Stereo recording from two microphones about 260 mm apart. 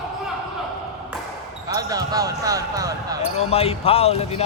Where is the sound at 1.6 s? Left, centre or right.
Centre.